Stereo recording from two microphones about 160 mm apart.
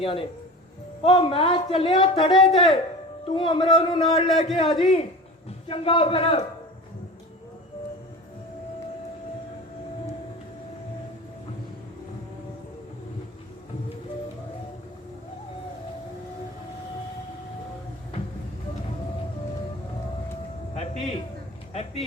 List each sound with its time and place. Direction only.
0.0 s speech: 35° left (ahead or behind)
4.3 s speech: centre (ahead or behind)
4.5 s speech: 30° left (ahead or behind)
20.7 s a sound: 40° left (ahead or behind)